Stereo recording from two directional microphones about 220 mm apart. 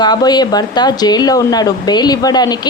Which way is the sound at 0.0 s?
20° left (ahead or behind).